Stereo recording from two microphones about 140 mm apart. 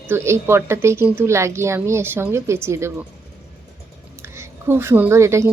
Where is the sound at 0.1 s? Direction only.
20° right (ahead or behind).